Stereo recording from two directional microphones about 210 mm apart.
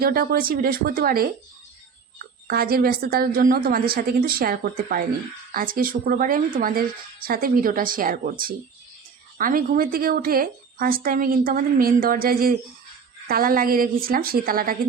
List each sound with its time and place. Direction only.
0.0 s speech: 45° right (ahead or behind)
2.5 s speech: 45° right (ahead or behind)